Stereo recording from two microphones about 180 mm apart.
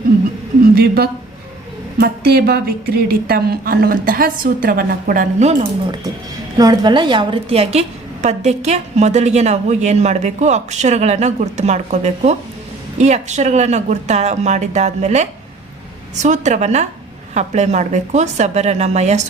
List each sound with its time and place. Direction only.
2.0 s a woman's voice: 60° right (ahead or behind); by 5.5 s 45° right (ahead or behind)
6.6 s a woman's voice: 25° right (ahead or behind); by 19.2 s 40° right (ahead or behind)